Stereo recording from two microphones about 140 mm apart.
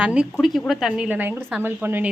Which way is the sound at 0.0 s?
5° right (ahead or behind).